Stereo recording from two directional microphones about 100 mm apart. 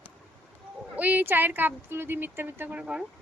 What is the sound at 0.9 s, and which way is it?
Speech, 15° right (ahead or behind).